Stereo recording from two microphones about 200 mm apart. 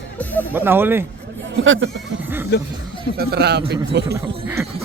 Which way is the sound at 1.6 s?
75° right (ahead or behind).